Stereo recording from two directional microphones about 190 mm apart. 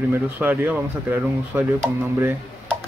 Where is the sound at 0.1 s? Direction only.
10° right (ahead or behind).